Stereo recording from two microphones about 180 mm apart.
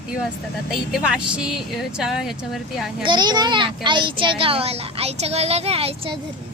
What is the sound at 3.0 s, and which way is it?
A child's voice, 25° right (ahead or behind).